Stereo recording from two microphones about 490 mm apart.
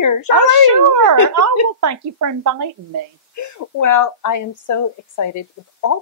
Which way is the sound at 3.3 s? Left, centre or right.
Left.